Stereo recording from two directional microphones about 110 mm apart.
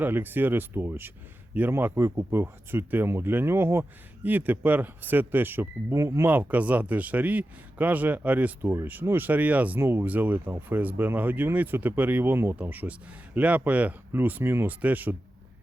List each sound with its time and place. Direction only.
0.0 s speech: 20° right (ahead or behind)